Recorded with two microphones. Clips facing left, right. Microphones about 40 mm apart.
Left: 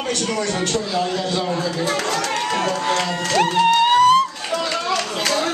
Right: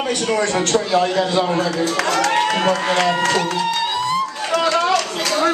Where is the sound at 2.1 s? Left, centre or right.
Right.